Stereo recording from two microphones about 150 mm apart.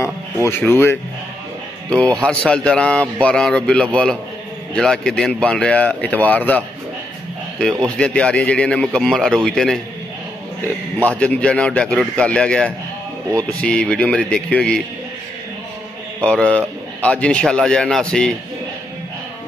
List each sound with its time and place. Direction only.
0.0 s a sound: 15° left (ahead or behind)
1.9 s speech: 5° left (ahead or behind)
8.0 s speech: 5° left (ahead or behind)
11.0 s speech: 10° left (ahead or behind)
16.2 s speech: 5° left (ahead or behind)